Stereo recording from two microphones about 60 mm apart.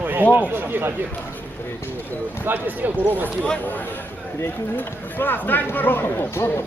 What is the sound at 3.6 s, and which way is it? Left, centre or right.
Speech, left.